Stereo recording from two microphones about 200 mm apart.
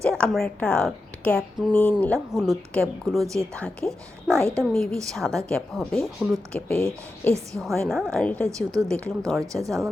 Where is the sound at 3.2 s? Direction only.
15° right (ahead or behind).